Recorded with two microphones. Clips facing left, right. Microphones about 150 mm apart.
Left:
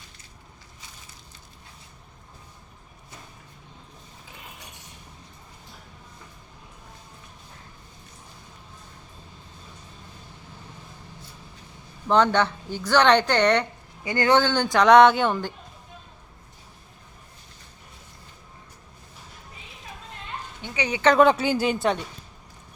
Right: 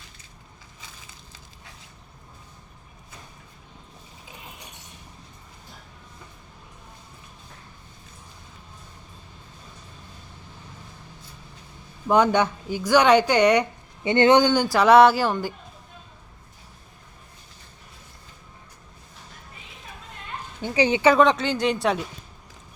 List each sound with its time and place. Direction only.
12.0 s a woman's voice: 10° right (ahead or behind)
14.0 s a woman's voice: 25° right (ahead or behind); by 15.5 s 5° right (ahead or behind)
20.6 s bow-wow: 35° right (ahead or behind)
21.2 s speech: 5° left (ahead or behind)